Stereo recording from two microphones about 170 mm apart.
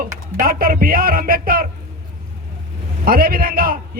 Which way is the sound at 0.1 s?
55° right (ahead or behind).